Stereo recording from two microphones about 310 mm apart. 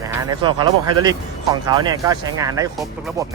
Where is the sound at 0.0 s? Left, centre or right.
Centre.